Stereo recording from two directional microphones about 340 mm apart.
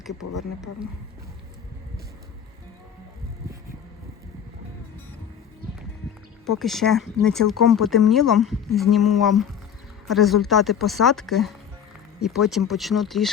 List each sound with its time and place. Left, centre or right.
6.6 s speech: centre